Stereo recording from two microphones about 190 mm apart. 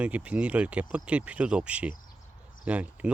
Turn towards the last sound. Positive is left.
turn(degrees=-5)  # may be behind; listen again after turning